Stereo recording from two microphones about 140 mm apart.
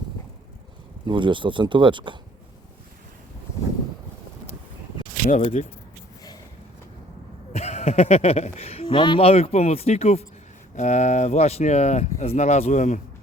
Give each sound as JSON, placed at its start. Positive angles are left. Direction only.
{"t": 1.0, "sound": "speech", "side_deg": -35}
{"t": 5.2, "sound": "speech", "side_deg": 60}
{"t": 7.5, "sound": "speech", "side_deg": 50}